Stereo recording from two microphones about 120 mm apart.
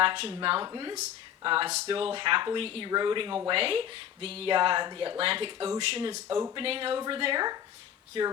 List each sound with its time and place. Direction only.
0.0 s speech: 50° right (ahead or behind)
0.6 s a woman's voice: 35° right (ahead or behind)
1.5 s speech: 50° right (ahead or behind)
2.9 s a woman's voice: 40° right (ahead or behind)
3.5 s speech: 50° right (ahead or behind)
6.2 s speech: 25° right (ahead or behind)
6.6 s a woman's voice: 50° right (ahead or behind)